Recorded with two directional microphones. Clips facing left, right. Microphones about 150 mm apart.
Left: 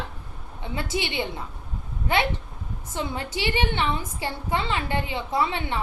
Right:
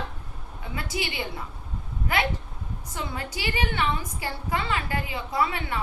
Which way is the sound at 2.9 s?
25° left (ahead or behind).